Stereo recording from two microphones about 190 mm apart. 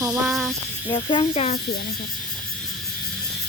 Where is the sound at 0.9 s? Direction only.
30° left (ahead or behind).